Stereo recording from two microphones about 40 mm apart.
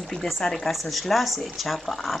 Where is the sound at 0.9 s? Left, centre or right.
Centre.